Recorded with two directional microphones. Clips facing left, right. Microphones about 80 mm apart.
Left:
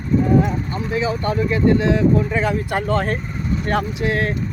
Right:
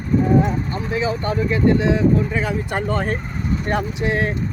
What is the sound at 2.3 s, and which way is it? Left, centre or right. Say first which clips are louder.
Speech: left 2 dB; centre.